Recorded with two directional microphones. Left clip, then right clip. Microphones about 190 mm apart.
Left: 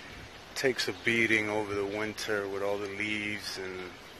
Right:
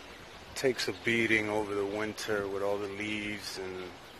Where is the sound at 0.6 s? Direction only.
Centre (ahead or behind).